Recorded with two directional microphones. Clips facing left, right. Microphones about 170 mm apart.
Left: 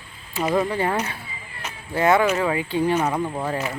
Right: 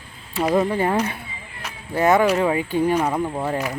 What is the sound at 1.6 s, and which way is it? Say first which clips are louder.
Cat: right 2 dB; 15° right (ahead or behind).